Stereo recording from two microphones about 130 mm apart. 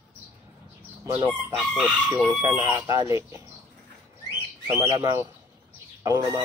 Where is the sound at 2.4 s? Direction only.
30° right (ahead or behind).